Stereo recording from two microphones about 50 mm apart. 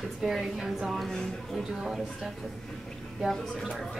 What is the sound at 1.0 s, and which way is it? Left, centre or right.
Speech, centre.